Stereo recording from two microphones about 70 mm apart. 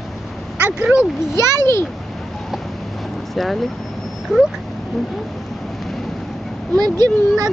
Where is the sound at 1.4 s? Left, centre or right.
Right.